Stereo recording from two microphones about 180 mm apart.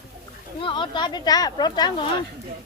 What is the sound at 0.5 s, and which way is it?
Speech, 30° left (ahead or behind).